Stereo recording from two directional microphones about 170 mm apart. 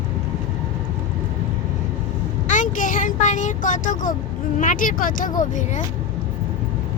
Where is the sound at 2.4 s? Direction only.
50° left (ahead or behind).